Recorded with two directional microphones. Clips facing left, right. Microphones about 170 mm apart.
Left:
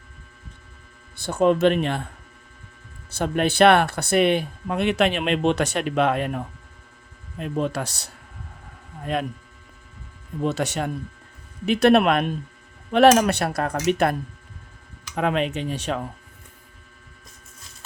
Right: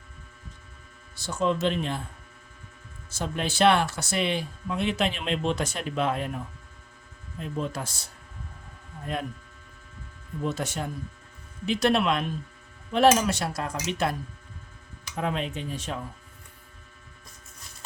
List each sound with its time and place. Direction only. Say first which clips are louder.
1.1 s speech: left 7 dB; 55° left (ahead or behind)
3.1 s speech: left 8 dB; 60° left (ahead or behind); by 9.2 s 85° left
10.4 s speech: left 6 dB; 75° left (ahead or behind)
11.6 s speech: left 7 dB; 60° left (ahead or behind)
12.9 s speech: left 5 dB; 75° left (ahead or behind); by 14.2 s 60° left (ahead or behind)
15.1 s speech: left 7 dB; 75° left (ahead or behind)